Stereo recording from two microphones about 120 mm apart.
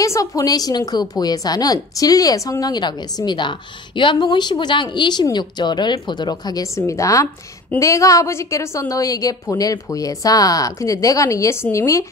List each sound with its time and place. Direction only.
0.0 s a woman's voice: 25° left (ahead or behind)